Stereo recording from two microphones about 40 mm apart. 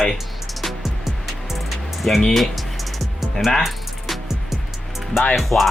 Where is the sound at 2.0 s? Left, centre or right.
Centre.